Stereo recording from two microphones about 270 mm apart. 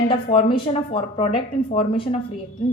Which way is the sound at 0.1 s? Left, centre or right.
Centre.